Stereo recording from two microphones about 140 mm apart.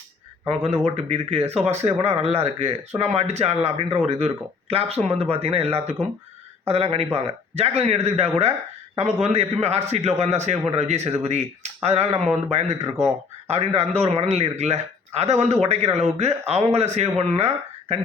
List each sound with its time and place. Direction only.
0.4 s a man's voice: 45° right (ahead or behind)
14.0 s a man's voice: 45° right (ahead or behind)